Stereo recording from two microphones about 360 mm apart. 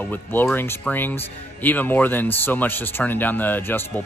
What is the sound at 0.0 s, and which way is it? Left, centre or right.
Speech, centre.